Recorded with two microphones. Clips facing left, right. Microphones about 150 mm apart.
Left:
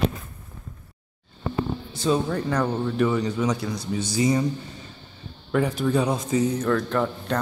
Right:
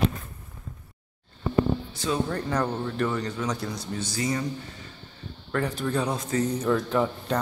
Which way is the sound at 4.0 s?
15° left (ahead or behind).